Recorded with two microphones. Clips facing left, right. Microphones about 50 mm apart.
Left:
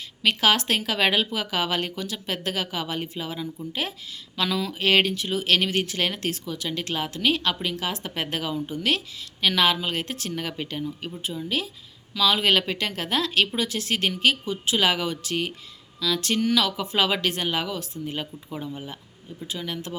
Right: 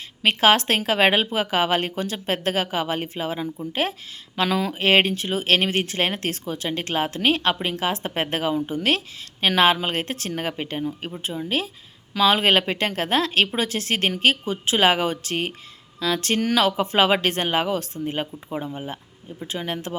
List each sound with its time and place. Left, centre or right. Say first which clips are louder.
0.2 s speech: right 4 dB; right